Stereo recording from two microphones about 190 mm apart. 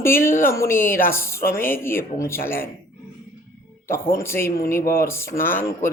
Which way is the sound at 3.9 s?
15° left (ahead or behind).